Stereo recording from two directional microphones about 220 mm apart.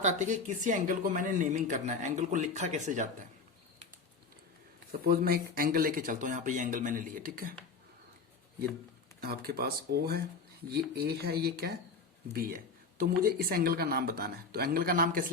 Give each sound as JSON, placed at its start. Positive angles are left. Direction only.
{"t": 0.0, "sound": "speech", "side_deg": -35}
{"t": 4.9, "sound": "speech", "side_deg": -40}
{"t": 9.2, "sound": "speech", "side_deg": -45}